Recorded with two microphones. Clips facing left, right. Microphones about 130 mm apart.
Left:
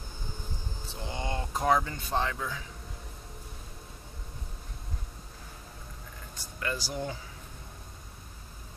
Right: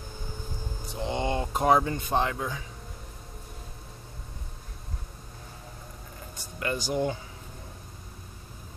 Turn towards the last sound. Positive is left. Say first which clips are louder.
# right 6 dB
turn(degrees=-20)  # may be behind; listen again after turning